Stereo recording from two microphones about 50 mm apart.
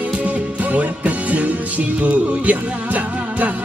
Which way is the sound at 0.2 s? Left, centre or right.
Right.